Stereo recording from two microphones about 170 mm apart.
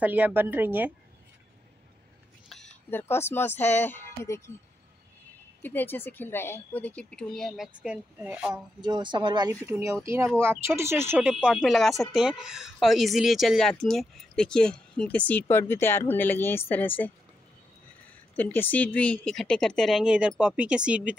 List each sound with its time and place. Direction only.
0.0 s speech: 10° right (ahead or behind)
2.5 s a sound: centre (ahead or behind)
2.9 s a woman's voice: 15° left (ahead or behind)
5.6 s a woman's voice: 10° left (ahead or behind); by 8.6 s 5° right (ahead or behind)
8.8 s speech: 25° right (ahead or behind); by 17.1 s 10° left (ahead or behind)
18.3 s speech: 10° left (ahead or behind); by 21.2 s 5° right (ahead or behind)